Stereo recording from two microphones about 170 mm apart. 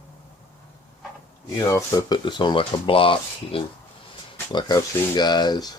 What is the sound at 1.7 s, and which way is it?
Speech, 20° left (ahead or behind).